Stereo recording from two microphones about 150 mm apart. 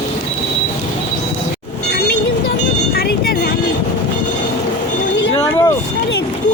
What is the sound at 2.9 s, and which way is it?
Vehicle, 90° left.